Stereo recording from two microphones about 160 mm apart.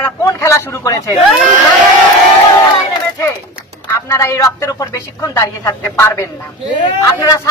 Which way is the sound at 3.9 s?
15° left (ahead or behind).